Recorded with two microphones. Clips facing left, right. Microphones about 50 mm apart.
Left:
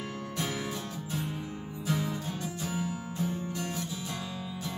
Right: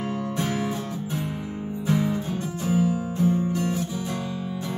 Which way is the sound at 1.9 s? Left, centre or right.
Right.